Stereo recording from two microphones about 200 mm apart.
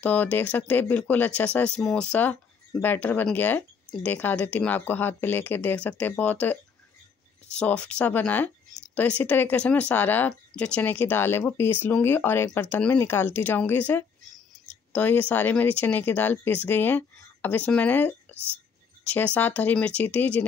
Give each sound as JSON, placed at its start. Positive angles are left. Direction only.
{"t": 0.0, "sound": "speech", "side_deg": 5}